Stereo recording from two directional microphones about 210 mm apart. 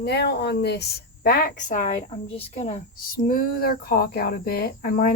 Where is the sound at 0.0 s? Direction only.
50° left (ahead or behind); by 2.7 s 30° left (ahead or behind).